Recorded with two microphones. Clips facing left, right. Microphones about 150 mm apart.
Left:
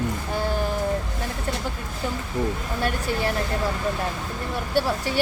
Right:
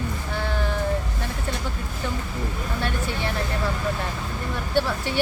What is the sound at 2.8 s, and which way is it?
Speech, 40° left (ahead or behind).